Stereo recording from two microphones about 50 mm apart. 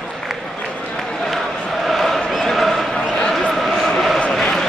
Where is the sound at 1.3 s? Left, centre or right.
Centre.